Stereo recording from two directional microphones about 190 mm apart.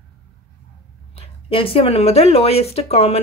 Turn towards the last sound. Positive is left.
turn(degrees=30)  # may be behind; listen again after turning